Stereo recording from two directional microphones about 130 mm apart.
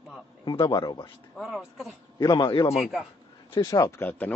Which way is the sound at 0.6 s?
35° left (ahead or behind).